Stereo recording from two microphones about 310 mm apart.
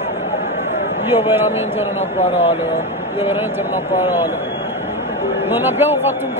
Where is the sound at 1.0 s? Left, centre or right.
Centre.